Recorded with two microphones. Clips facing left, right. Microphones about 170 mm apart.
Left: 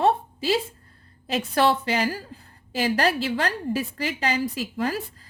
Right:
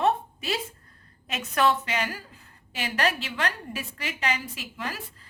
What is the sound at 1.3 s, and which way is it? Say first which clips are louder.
A woman's voice: left 3 dB; 30° left (ahead or behind).